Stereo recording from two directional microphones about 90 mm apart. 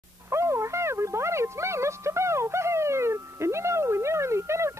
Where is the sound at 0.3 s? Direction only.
30° right (ahead or behind).